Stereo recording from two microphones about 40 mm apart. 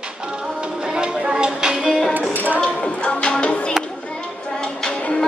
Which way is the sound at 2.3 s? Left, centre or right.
Right.